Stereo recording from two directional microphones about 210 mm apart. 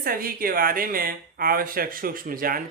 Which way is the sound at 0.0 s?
45° right (ahead or behind).